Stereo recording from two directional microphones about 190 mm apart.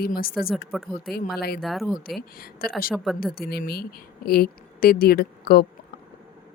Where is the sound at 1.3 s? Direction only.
55° left (ahead or behind).